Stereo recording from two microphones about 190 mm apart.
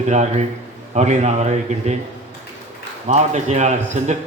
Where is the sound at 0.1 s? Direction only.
35° right (ahead or behind).